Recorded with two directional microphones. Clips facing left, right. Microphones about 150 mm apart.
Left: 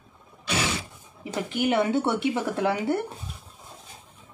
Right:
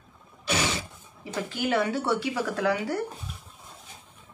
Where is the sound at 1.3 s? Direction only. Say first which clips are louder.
Left 2 dB; 20° left (ahead or behind).